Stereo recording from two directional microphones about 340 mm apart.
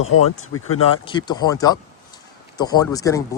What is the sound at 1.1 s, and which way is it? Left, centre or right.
Speech, centre.